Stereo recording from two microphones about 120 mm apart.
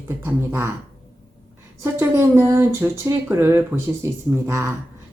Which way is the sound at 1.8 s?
20° right (ahead or behind).